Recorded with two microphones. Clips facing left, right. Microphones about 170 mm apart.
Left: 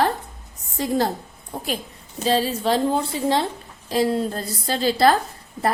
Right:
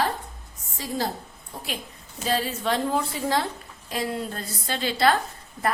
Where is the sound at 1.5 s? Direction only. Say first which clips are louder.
Left 7 dB; 50° left (ahead or behind).